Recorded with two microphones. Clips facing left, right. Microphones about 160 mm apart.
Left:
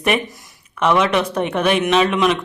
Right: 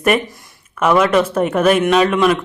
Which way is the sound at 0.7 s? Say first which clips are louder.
Right 3 dB; 5° right (ahead or behind).